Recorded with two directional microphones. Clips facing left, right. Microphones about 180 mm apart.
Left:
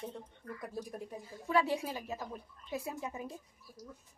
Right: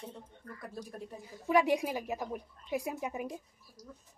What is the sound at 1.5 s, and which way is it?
A woman's voice, 15° right (ahead or behind).